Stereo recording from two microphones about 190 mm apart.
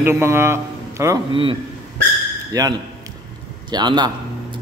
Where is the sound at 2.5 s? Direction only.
20° right (ahead or behind).